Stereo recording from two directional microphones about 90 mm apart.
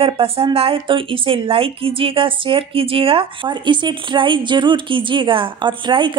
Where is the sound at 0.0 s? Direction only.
90° right.